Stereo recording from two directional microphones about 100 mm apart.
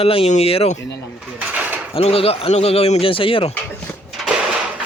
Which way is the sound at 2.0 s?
75° left (ahead or behind).